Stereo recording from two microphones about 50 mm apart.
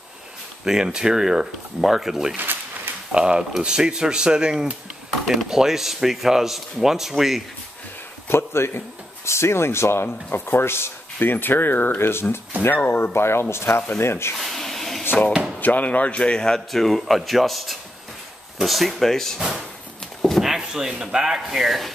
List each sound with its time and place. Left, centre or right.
0.7 s speech: centre
2.3 s a sound: right
3.1 s speech: centre
5.2 s speech: centre
8.3 s speech: left
10.3 s speech: left
12.1 s speech: left
12.6 s speech: left
13.1 s speech: left
14.3 s a sound: centre
15.6 s speech: left; by 19.4 s centre
20.2 s a sound: centre
20.4 s speech: centre